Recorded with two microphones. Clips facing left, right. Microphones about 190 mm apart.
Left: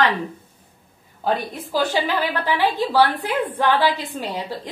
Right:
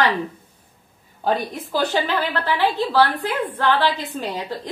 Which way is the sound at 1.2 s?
10° left (ahead or behind).